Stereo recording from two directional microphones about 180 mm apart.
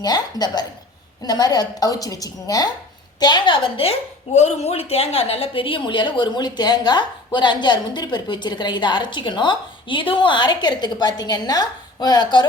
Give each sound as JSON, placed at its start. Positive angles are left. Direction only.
{"t": 0.0, "sound": "a woman's voice", "side_deg": 20}